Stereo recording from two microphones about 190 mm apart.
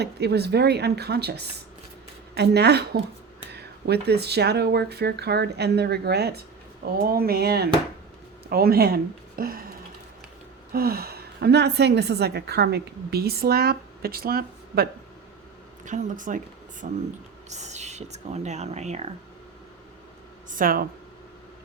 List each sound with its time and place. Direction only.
0.0 s a woman's voice: 60° right (ahead or behind)
10.7 s a woman's voice: 55° right (ahead or behind)
15.8 s speech: 40° right (ahead or behind)
20.5 s speech: 50° right (ahead or behind)